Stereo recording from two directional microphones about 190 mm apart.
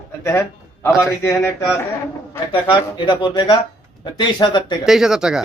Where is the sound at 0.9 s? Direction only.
5° right (ahead or behind).